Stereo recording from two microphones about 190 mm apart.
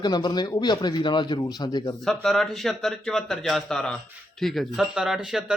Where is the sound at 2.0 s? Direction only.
Centre (ahead or behind).